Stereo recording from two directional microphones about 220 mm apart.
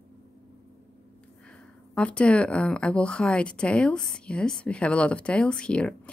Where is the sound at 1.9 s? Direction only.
5° left (ahead or behind).